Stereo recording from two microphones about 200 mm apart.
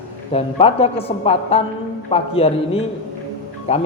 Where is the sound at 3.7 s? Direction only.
30° left (ahead or behind).